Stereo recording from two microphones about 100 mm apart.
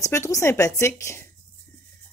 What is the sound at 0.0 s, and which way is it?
Speech, 30° left (ahead or behind).